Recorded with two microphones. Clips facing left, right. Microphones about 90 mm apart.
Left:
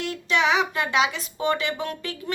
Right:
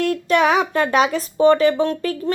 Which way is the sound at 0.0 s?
50° right (ahead or behind).